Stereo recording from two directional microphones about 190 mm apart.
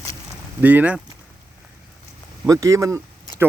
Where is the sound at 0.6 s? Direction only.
10° right (ahead or behind).